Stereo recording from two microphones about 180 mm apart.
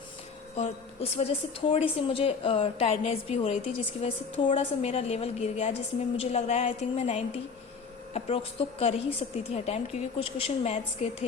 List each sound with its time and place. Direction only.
1.1 s a woman's voice: 35° left (ahead or behind)